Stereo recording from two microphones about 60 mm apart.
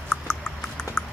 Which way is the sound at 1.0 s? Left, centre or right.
Centre.